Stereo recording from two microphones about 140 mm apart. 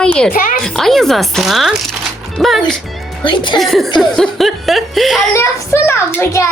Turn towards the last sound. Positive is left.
turn(degrees=20)  # may be behind; listen again after turning